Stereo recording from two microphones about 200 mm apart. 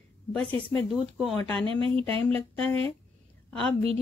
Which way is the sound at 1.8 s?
25° right (ahead or behind).